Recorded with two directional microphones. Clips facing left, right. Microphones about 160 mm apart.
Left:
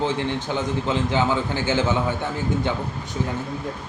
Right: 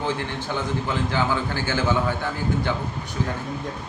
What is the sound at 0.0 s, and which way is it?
A man's voice, 20° left (ahead or behind).